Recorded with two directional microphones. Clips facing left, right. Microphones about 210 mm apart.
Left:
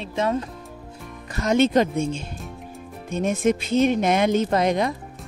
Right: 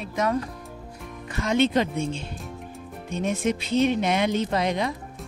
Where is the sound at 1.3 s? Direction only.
40° left (ahead or behind).